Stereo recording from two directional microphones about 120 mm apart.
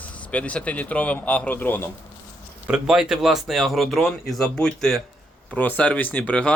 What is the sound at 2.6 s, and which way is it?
Speech, 5° right (ahead or behind).